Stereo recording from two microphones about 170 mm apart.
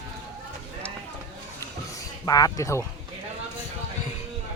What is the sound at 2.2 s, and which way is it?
Speech, 20° left (ahead or behind).